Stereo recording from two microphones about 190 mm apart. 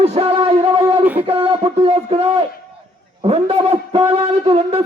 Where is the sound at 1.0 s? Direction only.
10° right (ahead or behind).